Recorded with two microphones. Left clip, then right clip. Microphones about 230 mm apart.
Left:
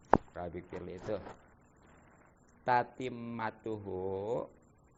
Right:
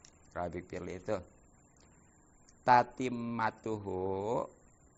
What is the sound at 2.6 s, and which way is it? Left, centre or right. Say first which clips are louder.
Speech: right 5 dB; right.